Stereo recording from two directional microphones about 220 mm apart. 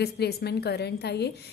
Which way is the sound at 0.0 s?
45° left (ahead or behind).